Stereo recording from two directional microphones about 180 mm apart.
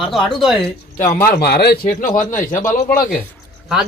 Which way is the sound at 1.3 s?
60° left (ahead or behind).